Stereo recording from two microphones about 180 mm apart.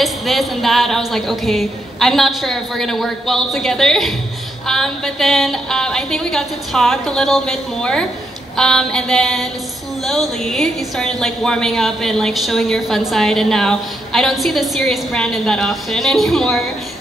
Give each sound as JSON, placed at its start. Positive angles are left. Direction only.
{"t": 0.0, "sound": "a woman's voice", "side_deg": 0}